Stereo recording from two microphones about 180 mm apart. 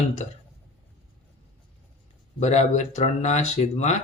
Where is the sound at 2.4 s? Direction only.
40° left (ahead or behind).